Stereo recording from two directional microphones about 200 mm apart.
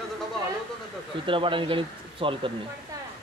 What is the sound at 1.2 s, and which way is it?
Speech, 25° right (ahead or behind).